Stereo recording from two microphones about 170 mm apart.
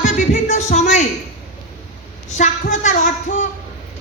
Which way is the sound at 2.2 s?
45° left (ahead or behind).